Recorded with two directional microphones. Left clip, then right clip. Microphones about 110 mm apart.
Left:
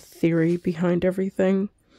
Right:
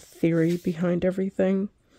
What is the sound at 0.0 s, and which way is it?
Speech, 15° left (ahead or behind).